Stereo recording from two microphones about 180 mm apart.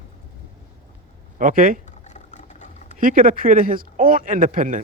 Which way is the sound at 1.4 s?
50° right (ahead or behind).